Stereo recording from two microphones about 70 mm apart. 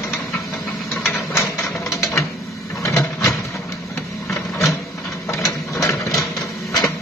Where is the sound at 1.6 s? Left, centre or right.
Left.